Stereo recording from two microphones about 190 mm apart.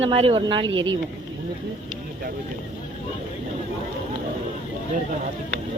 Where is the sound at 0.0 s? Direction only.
30° right (ahead or behind).